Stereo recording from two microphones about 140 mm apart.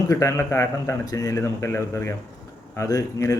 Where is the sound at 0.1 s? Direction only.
20° left (ahead or behind).